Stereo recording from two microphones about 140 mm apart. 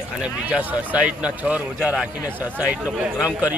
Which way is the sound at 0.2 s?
10° right (ahead or behind).